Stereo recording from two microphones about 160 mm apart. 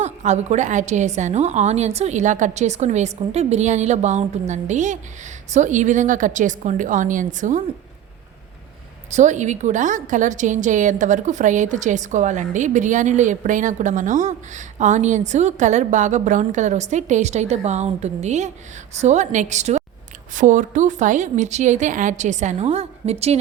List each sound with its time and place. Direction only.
0.0 s a woman's voice: 45° right (ahead or behind)
9.0 s a woman's voice: 45° right (ahead or behind)